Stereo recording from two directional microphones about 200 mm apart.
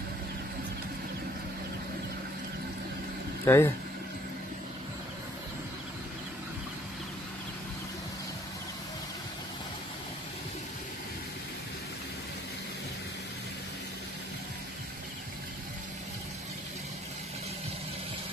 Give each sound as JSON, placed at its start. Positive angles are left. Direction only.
{"t": 3.4, "sound": "speech", "side_deg": 10}